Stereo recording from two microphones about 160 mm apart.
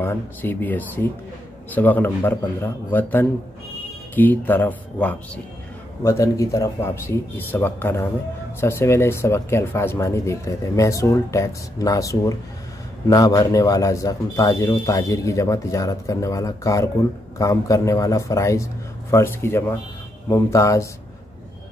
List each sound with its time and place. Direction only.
0.0 s speech: 15° left (ahead or behind)